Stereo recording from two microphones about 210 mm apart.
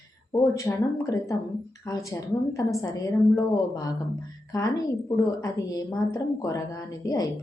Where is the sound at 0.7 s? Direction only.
10° left (ahead or behind).